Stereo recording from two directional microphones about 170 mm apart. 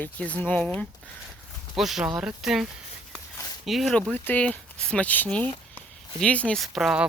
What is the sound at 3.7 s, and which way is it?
Speech, centre (ahead or behind).